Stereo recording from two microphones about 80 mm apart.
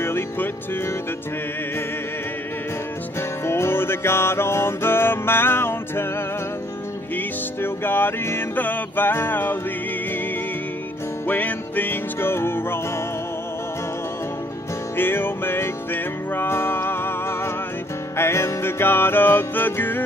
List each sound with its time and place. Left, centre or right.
0.0 s music: left
3.2 s music: left
7.6 s music: left
11.2 s music: left
15.0 s music: left
18.1 s music: left